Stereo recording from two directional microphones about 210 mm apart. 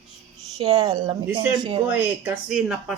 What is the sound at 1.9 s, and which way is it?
Speech, 10° right (ahead or behind).